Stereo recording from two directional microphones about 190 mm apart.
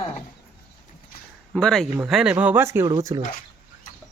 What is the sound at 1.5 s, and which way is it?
Speech, centre (ahead or behind).